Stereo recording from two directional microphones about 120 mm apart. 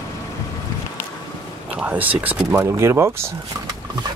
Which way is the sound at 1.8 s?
15° right (ahead or behind).